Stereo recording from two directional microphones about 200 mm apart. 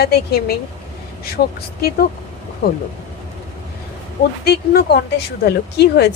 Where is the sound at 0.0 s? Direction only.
50° left (ahead or behind).